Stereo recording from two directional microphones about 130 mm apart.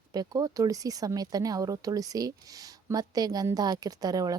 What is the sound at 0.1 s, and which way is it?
Speech, 30° right (ahead or behind).